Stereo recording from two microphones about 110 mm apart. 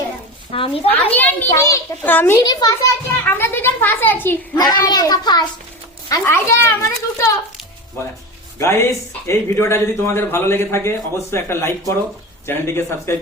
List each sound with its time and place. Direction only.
0.5 s a woman's voice: 55° left (ahead or behind)
0.9 s a child's voice: 15° left (ahead or behind)
1.5 s speech: 30° left (ahead or behind)
2.0 s a child's voice: 20° left (ahead or behind)
2.4 s a child's voice: 35° left (ahead or behind)
3.2 s speech: 20° left (ahead or behind)
4.5 s a child's voice: 35° left (ahead or behind)